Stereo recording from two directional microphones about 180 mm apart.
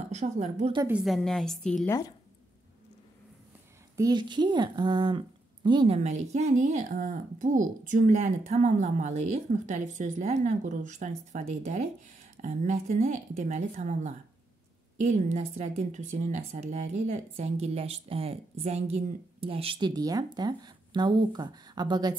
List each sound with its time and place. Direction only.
0.1 s a woman's voice: 40° right (ahead or behind)
0.8 s a woman's voice: 5° right (ahead or behind)
1.9 s speech: 15° left (ahead or behind)
3.9 s speech: 20° right (ahead or behind)
6.0 s a woman's voice: 40° right (ahead or behind); by 22.1 s 25° right (ahead or behind)